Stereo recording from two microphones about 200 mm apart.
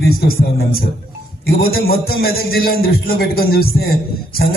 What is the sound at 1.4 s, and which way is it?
A man's voice, 50° left (ahead or behind).